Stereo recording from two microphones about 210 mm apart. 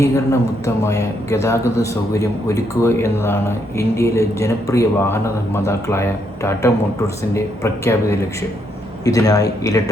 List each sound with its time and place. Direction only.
0.0 s speech: 15° left (ahead or behind)